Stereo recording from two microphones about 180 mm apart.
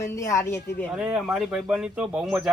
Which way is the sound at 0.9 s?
5° right (ahead or behind).